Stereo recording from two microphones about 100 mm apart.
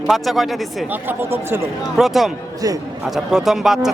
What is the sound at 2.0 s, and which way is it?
Speech, centre (ahead or behind).